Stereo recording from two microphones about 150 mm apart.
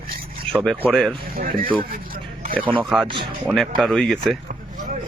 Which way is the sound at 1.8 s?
75° right (ahead or behind).